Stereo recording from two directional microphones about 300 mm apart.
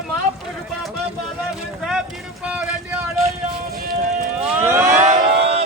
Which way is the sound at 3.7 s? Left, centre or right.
Right.